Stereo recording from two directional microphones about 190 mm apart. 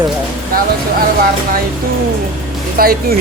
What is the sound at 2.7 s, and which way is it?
Speech, 50° right (ahead or behind).